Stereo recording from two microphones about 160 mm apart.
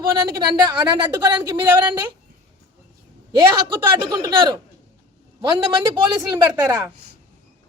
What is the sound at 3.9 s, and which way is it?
Speech, 25° right (ahead or behind).